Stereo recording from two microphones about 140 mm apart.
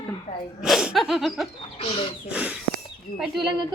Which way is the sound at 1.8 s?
40° left (ahead or behind).